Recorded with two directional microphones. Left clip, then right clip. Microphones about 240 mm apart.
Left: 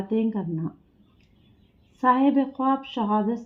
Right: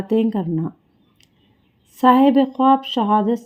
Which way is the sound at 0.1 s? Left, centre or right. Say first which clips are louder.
Right 8 dB; right.